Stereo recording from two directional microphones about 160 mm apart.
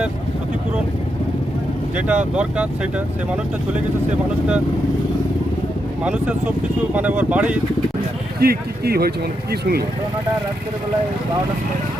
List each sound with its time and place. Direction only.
2.0 s speech: 10° right (ahead or behind)
6.0 s speech: 10° right (ahead or behind)
8.4 s speech: 75° right (ahead or behind)